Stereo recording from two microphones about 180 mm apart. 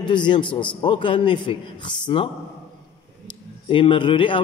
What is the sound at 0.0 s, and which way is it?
A man's voice, 25° left (ahead or behind).